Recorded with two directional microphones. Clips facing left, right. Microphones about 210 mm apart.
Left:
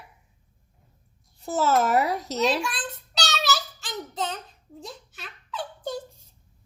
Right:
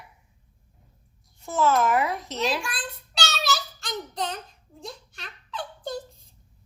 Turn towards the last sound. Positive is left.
turn(degrees=10)  # may be behind; listen again after turning